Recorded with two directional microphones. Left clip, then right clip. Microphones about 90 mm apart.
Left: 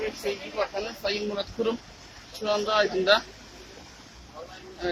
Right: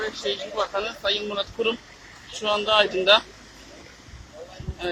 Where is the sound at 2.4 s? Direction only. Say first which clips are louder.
Right 4 dB; 5° left (ahead or behind).